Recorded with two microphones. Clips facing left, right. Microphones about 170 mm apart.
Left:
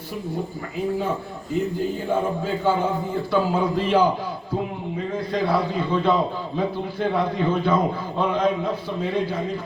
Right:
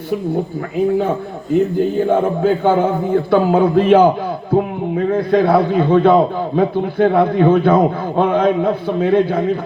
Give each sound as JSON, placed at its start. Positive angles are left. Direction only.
{"t": 2.0, "sound": "a man's voice", "side_deg": -55}